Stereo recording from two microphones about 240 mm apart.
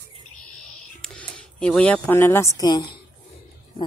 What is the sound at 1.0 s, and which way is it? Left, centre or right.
A woman's voice, centre.